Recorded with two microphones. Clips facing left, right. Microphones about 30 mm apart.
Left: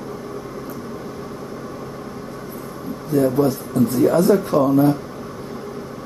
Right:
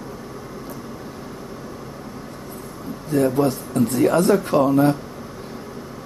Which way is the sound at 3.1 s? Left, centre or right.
Right.